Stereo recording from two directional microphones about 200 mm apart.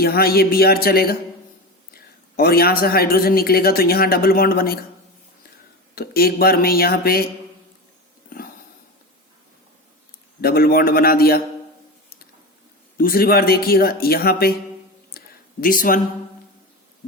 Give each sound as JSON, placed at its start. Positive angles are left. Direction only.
{"t": 0.0, "sound": "speech", "side_deg": 50}
{"t": 2.3, "sound": "speech", "side_deg": 50}
{"t": 5.9, "sound": "speech", "side_deg": 50}
{"t": 10.4, "sound": "speech", "side_deg": 50}
{"t": 13.0, "sound": "speech", "side_deg": 45}
{"t": 15.6, "sound": "speech", "side_deg": 45}